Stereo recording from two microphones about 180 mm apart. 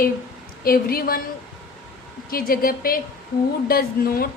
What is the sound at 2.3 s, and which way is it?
A woman's voice, 55° left (ahead or behind).